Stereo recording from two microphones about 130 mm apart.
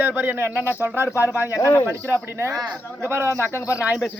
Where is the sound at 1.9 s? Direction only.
20° right (ahead or behind).